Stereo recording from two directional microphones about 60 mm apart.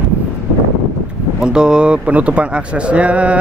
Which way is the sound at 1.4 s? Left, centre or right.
Centre.